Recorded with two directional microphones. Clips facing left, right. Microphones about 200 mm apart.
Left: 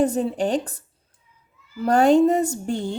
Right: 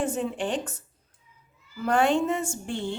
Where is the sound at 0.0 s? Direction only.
40° left (ahead or behind).